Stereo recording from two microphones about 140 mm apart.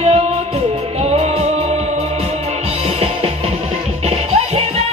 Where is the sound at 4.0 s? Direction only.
50° right (ahead or behind).